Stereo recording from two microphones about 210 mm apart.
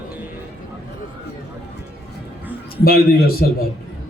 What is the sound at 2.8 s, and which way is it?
Speech, 45° left (ahead or behind).